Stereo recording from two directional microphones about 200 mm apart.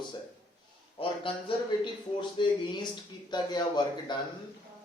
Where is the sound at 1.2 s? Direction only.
25° left (ahead or behind).